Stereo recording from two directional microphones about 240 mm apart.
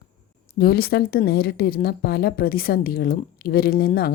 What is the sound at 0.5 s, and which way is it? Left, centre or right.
Speech, left.